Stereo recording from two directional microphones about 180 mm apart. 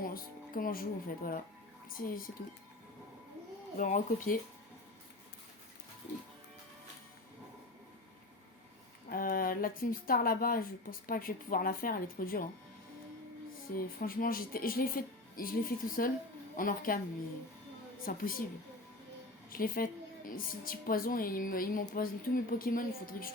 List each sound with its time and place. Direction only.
0.0 s a woman's voice: 50° left (ahead or behind)
3.8 s a woman's voice: 45° left (ahead or behind)
9.0 s a woman's voice: 55° left (ahead or behind)
13.7 s a woman's voice: 55° left (ahead or behind)
18.0 s a woman's voice: 50° left (ahead or behind)
19.5 s a woman's voice: 55° left (ahead or behind)